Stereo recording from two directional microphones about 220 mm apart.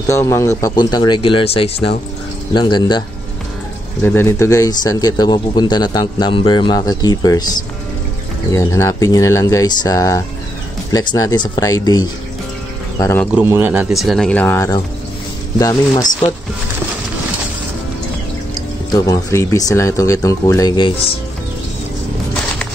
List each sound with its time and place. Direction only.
0.0 s speech: 10° left (ahead or behind)
4.0 s speech: 10° left (ahead or behind)
8.5 s speech: 10° left (ahead or behind)
13.3 s speech: 10° right (ahead or behind); by 16.0 s 15° left (ahead or behind)
18.9 s speech: 15° left (ahead or behind)